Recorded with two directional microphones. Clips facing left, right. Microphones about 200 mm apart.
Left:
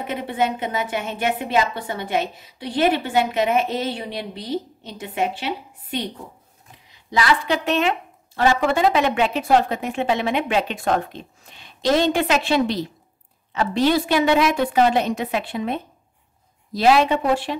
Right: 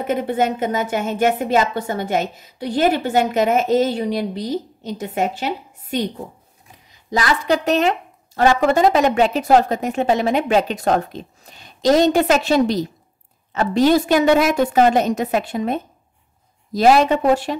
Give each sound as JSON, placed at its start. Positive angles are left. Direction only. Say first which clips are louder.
{"t": 0.0, "sound": "a woman's voice", "louder": "right 4 dB", "side_deg": -45}